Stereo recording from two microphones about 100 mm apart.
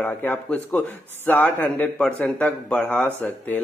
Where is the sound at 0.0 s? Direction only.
15° left (ahead or behind).